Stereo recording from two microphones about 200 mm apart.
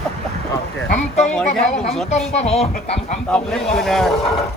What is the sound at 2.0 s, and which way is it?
Speech, 35° left (ahead or behind).